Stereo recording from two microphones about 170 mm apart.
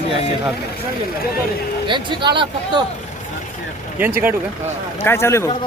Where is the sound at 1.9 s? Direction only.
25° right (ahead or behind).